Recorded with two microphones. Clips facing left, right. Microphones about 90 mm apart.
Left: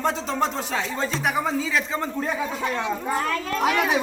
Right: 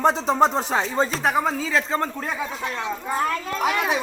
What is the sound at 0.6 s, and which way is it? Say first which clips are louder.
Music: right 4 dB; 50° right (ahead or behind).